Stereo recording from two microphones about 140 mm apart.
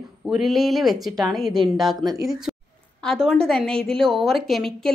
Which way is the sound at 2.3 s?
Centre (ahead or behind).